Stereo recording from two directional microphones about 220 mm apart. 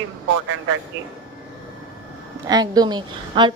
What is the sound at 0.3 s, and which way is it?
Speech, 60° right (ahead or behind).